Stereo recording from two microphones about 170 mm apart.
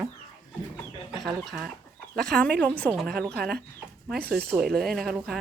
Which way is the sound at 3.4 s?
65° right (ahead or behind).